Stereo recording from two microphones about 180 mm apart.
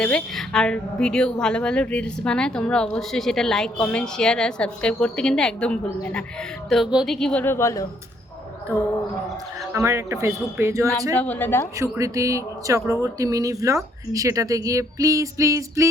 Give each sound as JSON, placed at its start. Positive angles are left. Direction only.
{"t": 0.0, "sound": "speech", "side_deg": 5}
{"t": 9.7, "sound": "speech", "side_deg": -15}
{"t": 11.2, "sound": "speech", "side_deg": 10}
{"t": 11.8, "sound": "speech", "side_deg": -15}